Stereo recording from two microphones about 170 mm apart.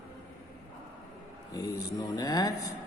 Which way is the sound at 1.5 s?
20° left (ahead or behind).